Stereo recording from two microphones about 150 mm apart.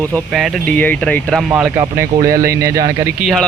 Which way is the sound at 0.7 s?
10° left (ahead or behind).